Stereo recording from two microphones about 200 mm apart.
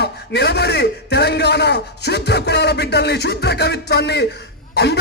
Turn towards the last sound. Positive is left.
turn(degrees=55)  # may be behind; listen again after turning